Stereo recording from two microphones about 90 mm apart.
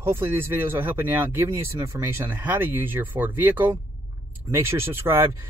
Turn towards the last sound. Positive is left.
turn(degrees=-25)  # may be behind; listen again after turning